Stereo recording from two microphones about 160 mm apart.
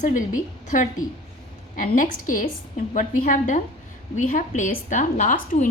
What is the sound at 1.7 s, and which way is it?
A woman's voice, 55° left (ahead or behind).